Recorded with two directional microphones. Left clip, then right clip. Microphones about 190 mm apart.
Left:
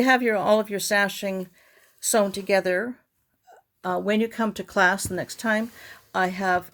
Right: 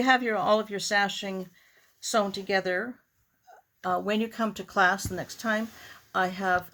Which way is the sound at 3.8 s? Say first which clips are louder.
Left 3 dB; 30° left (ahead or behind).